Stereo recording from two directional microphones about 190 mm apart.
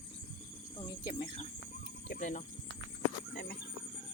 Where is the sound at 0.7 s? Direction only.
25° left (ahead or behind).